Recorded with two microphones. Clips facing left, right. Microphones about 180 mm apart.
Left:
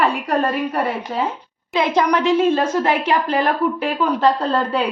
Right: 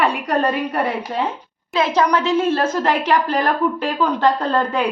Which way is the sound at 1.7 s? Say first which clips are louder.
Even; 20° left (ahead or behind).